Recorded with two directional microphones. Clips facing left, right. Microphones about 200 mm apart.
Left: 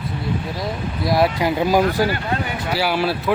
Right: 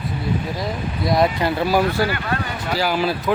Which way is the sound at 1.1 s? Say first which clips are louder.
Even; 5° left (ahead or behind).